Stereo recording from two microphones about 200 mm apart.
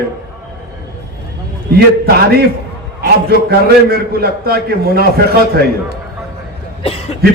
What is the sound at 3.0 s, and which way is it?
A man's voice, 50° right (ahead or behind).